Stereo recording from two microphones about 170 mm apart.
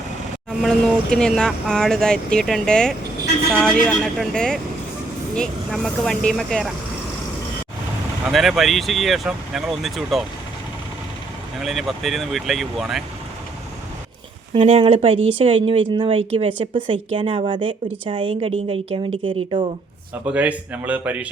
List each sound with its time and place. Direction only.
0.6 s speech: 5° left (ahead or behind)
8.3 s speech: centre (ahead or behind)
11.6 s speech: centre (ahead or behind)
14.5 s speech: 35° right (ahead or behind)
20.2 s speech: 5° right (ahead or behind)